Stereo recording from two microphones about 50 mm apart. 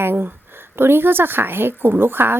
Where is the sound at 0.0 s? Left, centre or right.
Right.